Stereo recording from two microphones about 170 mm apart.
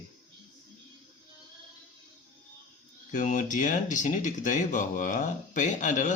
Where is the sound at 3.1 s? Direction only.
50° left (ahead or behind).